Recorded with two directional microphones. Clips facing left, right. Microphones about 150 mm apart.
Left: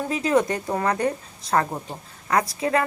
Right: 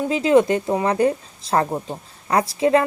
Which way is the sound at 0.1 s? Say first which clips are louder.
Right 6 dB; 25° right (ahead or behind).